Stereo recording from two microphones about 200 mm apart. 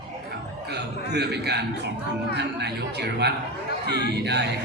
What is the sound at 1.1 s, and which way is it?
Speech, 55° right (ahead or behind).